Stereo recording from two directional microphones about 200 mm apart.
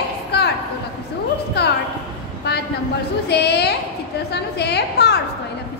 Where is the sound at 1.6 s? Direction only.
55° left (ahead or behind).